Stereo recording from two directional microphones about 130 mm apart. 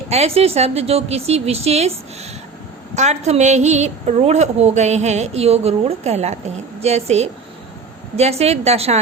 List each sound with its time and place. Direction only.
0.1 s a woman's voice: 50° right (ahead or behind)
2.9 s a woman's voice: 60° right (ahead or behind)